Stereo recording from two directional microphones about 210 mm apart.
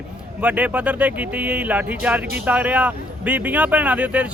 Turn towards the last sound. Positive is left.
turn(degrees=-5)  # may be behind; listen again after turning